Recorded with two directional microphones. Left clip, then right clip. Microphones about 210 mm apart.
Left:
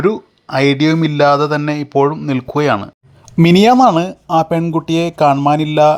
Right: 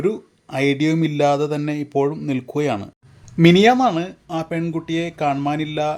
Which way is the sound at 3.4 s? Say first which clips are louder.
Left 4 dB; 30° left (ahead or behind).